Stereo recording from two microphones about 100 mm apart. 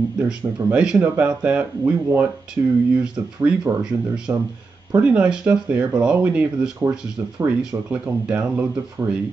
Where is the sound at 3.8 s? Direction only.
5° right (ahead or behind).